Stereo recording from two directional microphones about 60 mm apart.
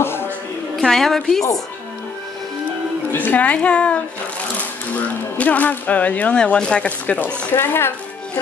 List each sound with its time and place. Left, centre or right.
0.0 s music: left
0.7 s a woman's voice: centre
3.1 s a woman's voice: left
3.3 s speech: left
7.5 s speech: left